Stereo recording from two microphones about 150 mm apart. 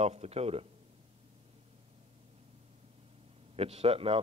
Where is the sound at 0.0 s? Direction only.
45° right (ahead or behind).